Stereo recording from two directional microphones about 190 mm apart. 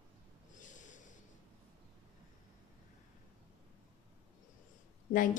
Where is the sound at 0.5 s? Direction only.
40° left (ahead or behind).